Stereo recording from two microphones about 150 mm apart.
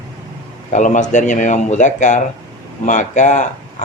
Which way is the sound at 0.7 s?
55° left (ahead or behind).